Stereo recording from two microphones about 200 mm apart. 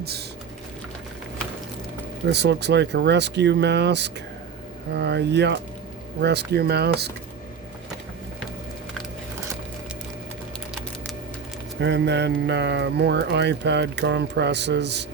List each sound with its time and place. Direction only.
0.0 s typing: 55° right (ahead or behind)
2.2 s speech: 55° right (ahead or behind)
11.8 s speech: 60° right (ahead or behind)